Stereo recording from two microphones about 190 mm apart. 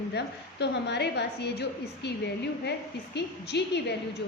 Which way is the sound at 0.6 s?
65° left (ahead or behind).